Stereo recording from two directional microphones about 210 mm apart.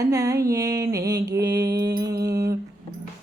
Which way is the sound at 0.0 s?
15° right (ahead or behind).